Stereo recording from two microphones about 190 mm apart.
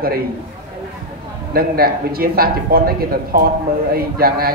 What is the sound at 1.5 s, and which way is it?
Speech, 50° right (ahead or behind).